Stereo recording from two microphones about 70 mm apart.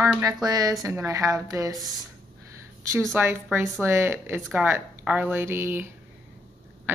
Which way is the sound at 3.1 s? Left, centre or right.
Right.